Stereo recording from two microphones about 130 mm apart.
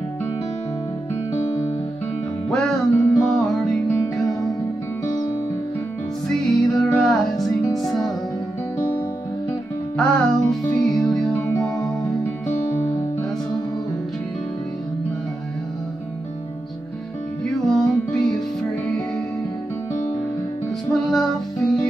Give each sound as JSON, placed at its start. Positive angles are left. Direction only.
{"t": 1.4, "sound": "music", "side_deg": 45}
{"t": 2.5, "sound": "music", "side_deg": 5}
{"t": 3.9, "sound": "music", "side_deg": 20}
{"t": 6.2, "sound": "music", "side_deg": 5}
{"t": 9.9, "sound": "music", "side_deg": 5}
{"t": 11.4, "sound": "music", "side_deg": 25}
{"t": 17.6, "sound": "music", "side_deg": 5}
{"t": 20.9, "sound": "music", "side_deg": 0}